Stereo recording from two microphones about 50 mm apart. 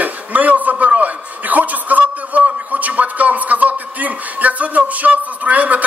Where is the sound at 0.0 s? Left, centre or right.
Right.